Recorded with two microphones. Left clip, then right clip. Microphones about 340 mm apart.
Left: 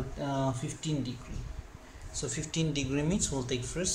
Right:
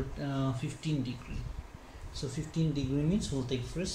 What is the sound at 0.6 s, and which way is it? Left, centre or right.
Speech, left.